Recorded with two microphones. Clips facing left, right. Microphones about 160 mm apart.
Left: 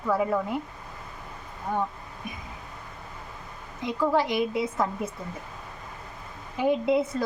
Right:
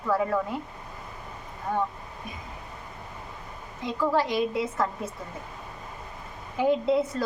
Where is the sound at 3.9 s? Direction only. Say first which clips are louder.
Left 1 dB; 15° left (ahead or behind).